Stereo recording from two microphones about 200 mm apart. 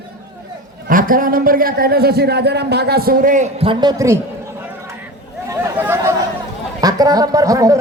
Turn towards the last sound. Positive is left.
turn(degrees=-15)  # may be behind; listen again after turning